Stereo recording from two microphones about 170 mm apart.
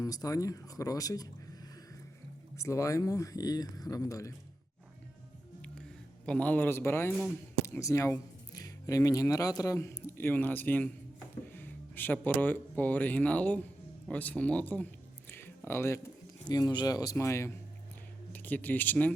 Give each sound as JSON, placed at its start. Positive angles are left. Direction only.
{"t": 0.0, "sound": "speech", "side_deg": 20}
{"t": 2.6, "sound": "speech", "side_deg": 15}
{"t": 6.2, "sound": "speech", "side_deg": 5}
{"t": 15.3, "sound": "a sound", "side_deg": 10}
{"t": 16.4, "sound": "speech", "side_deg": 25}